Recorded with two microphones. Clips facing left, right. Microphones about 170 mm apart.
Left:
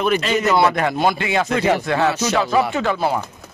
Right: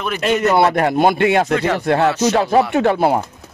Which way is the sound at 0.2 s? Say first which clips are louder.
Right 2 dB; 55° right (ahead or behind).